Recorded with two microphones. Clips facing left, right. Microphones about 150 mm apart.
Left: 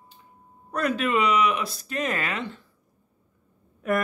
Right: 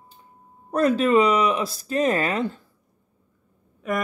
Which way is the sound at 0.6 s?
35° right (ahead or behind).